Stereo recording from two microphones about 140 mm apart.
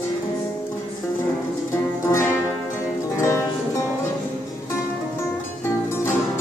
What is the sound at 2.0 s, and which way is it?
Music, 20° left (ahead or behind).